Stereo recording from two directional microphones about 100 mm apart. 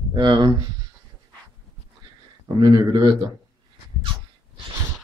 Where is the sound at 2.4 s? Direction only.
45° right (ahead or behind).